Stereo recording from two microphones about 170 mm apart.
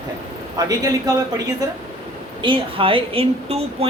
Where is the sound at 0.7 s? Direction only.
20° right (ahead or behind).